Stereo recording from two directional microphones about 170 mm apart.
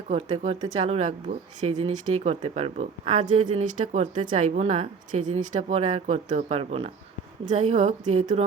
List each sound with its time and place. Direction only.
0.1 s a woman's voice: 40° right (ahead or behind)